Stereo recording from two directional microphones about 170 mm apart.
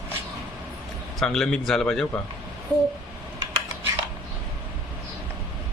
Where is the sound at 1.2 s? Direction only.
5° left (ahead or behind).